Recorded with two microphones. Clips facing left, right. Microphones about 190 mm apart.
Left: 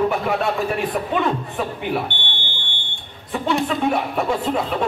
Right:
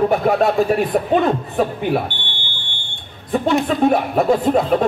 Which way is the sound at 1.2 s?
40° right (ahead or behind).